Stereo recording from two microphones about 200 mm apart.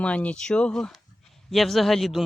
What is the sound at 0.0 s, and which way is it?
Speech, 5° left (ahead or behind).